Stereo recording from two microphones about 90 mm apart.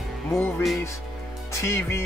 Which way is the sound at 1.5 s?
30° left (ahead or behind).